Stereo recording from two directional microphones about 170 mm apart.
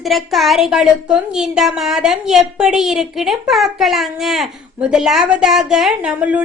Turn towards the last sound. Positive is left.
turn(degrees=-5)  # may be behind; listen again after turning